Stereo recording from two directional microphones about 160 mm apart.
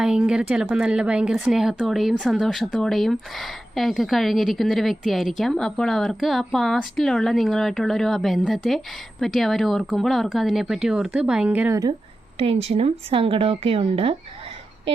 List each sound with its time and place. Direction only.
0.0 s speech: 5° right (ahead or behind)
12.4 s speech: 35° right (ahead or behind)